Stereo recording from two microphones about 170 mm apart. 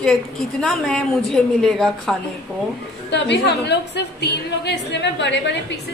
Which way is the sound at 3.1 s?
85° left.